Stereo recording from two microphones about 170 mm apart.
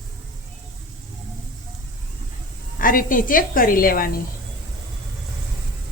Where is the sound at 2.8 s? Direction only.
55° left (ahead or behind).